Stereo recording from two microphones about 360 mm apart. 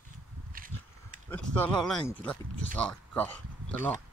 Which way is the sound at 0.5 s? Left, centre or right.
Right.